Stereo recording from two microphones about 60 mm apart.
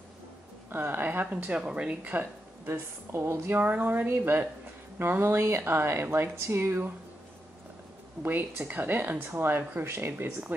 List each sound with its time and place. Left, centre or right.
0.7 s speech: right; by 2.1 s centre
2.1 s speech: right
3.5 s speech: right
8.2 s speech: right